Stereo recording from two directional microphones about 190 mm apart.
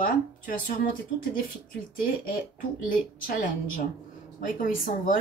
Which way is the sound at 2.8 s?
45° left (ahead or behind).